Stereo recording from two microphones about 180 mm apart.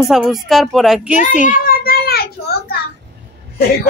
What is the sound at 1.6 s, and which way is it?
Child singing, 55° left (ahead or behind).